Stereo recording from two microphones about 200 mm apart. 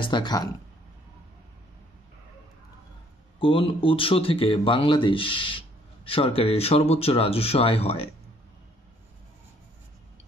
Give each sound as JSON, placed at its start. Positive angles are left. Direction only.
{"t": 0.0, "sound": "speech", "side_deg": 20}
{"t": 3.3, "sound": "speech", "side_deg": 25}